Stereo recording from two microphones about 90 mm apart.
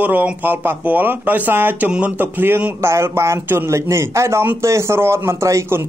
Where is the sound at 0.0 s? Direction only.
20° right (ahead or behind).